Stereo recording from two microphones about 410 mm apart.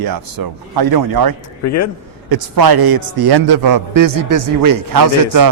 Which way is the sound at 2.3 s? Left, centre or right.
Right.